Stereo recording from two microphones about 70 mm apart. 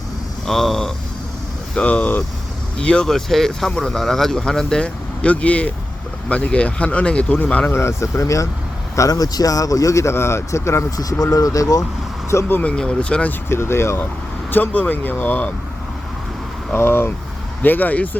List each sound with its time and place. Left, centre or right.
0.4 s speech: centre
1.7 s speech: centre
2.7 s speech: centre
5.2 s speech: left
7.7 s speech: left
10.9 s speech: left
12.3 s speech: left
12.5 s speech: centre
13.5 s speech: left
14.5 s speech: left
16.7 s speech: left